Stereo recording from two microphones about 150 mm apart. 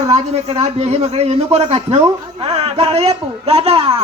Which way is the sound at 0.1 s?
45° right (ahead or behind).